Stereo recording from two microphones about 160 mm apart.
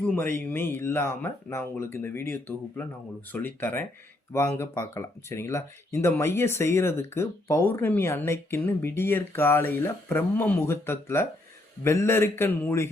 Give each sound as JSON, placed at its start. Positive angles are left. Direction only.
{"t": 0.0, "sound": "speech", "side_deg": 15}